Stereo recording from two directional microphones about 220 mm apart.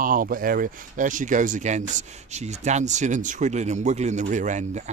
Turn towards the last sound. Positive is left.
turn(degrees=-30)  # may be behind; listen again after turning